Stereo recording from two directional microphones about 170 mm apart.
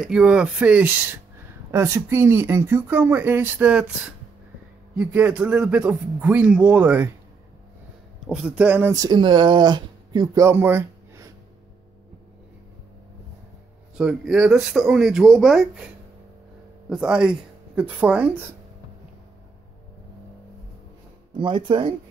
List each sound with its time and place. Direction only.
0.0 s speech: 5° right (ahead or behind)
8.3 s speech: 5° right (ahead or behind)
13.9 s speech: 5° right (ahead or behind)
16.9 s speech: 5° right (ahead or behind)
21.4 s speech: 30° right (ahead or behind)